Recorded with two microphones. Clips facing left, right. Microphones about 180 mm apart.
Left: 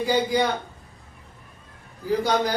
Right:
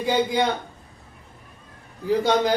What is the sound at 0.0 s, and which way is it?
Speech, 25° right (ahead or behind).